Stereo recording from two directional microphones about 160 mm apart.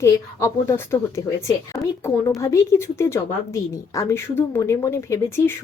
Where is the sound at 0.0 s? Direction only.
20° left (ahead or behind).